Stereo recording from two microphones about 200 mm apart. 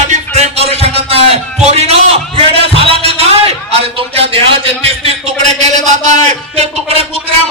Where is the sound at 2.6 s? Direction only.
30° right (ahead or behind).